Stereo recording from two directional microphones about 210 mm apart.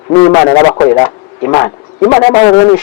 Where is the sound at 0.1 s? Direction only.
20° left (ahead or behind).